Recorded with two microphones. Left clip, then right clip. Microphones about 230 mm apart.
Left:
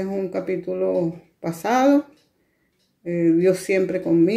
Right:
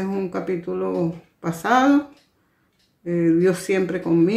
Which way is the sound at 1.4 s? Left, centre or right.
Right.